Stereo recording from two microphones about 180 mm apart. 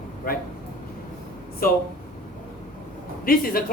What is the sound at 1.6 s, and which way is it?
Speech, 55° left (ahead or behind).